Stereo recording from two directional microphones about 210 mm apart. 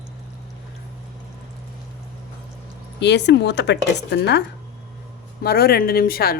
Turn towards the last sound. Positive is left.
turn(degrees=45)  # may be behind; listen again after turning